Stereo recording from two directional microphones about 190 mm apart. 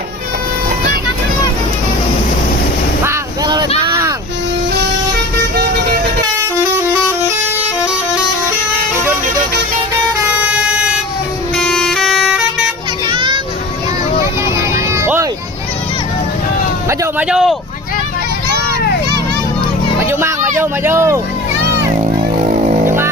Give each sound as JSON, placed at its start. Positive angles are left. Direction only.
{"t": 3.0, "sound": "boat", "side_deg": -20}
{"t": 3.8, "sound": "a sound", "side_deg": -20}
{"t": 10.3, "sound": "vehicle", "side_deg": -5}
{"t": 11.5, "sound": "music", "side_deg": 5}
{"t": 13.1, "sound": "music", "side_deg": -25}
{"t": 14.9, "sound": "music", "side_deg": -15}
{"t": 17.0, "sound": "a sound", "side_deg": -5}
{"t": 20.0, "sound": "children playing", "side_deg": -15}
{"t": 20.6, "sound": "a sound", "side_deg": -15}